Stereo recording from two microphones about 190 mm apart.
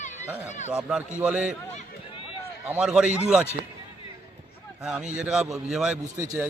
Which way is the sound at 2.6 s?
5° right (ahead or behind).